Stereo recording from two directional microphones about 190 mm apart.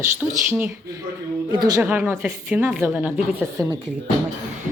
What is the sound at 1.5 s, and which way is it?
Speech, 20° right (ahead or behind).